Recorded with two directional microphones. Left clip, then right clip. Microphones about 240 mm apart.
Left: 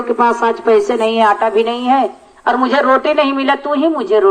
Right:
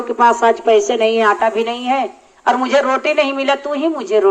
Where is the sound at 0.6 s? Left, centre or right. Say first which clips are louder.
Left 1 dB; centre.